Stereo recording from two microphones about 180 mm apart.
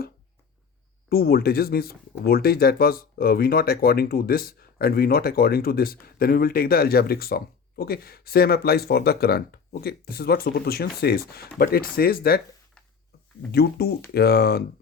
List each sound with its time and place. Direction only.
1.1 s speech: 55° left (ahead or behind)
13.5 s speech: 60° left (ahead or behind)